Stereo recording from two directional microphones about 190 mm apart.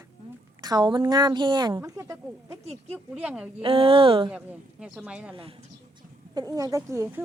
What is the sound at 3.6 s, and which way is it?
Speech, 30° right (ahead or behind).